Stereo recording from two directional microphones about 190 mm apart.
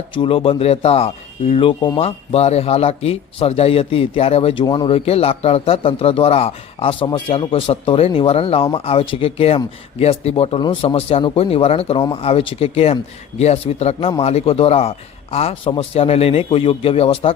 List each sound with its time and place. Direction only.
0.1 s speech: 25° left (ahead or behind)